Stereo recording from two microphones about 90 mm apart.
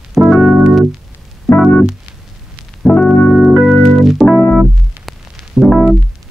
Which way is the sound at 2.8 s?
5° left (ahead or behind).